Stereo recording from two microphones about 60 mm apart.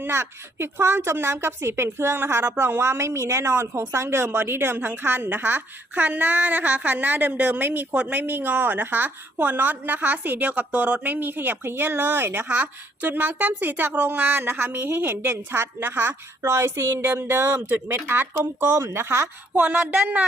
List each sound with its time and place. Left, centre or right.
0.0 s a woman's voice: right
16.4 s a woman's voice: right
19.5 s speech: right